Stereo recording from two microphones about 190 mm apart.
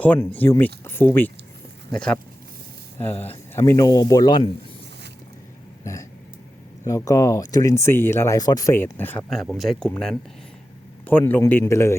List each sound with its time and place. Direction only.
0.0 s speech: 10° left (ahead or behind)
5.8 s a sound: 15° left (ahead or behind)
6.8 s speech: 15° left (ahead or behind)
9.3 s speech: centre (ahead or behind)